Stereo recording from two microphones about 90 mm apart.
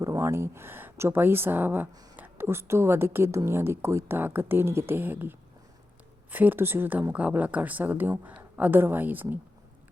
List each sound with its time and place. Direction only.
0.0 s speech: 35° right (ahead or behind)
6.3 s speech: 20° right (ahead or behind)